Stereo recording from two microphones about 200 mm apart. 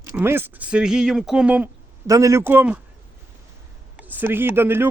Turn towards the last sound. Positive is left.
turn(degrees=-10)  # may be behind; listen again after turning